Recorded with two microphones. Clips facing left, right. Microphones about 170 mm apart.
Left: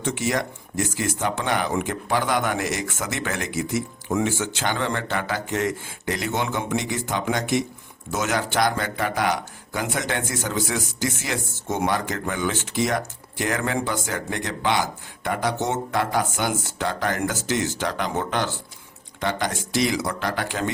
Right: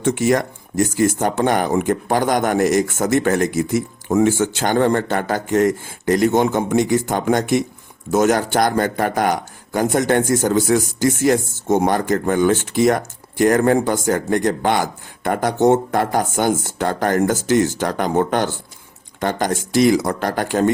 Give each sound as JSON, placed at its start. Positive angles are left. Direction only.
{"t": 0.0, "sound": "speech", "side_deg": -50}